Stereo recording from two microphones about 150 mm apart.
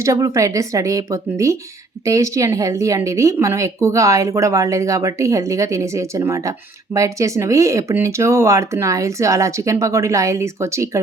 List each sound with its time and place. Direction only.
0.0 s speech: 20° right (ahead or behind)